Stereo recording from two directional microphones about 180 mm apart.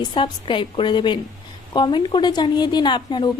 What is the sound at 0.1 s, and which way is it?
A woman's voice, 25° left (ahead or behind).